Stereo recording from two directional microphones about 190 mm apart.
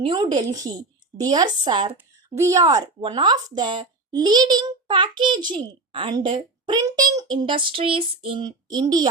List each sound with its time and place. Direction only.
0.0 s a woman's voice: 25° right (ahead or behind)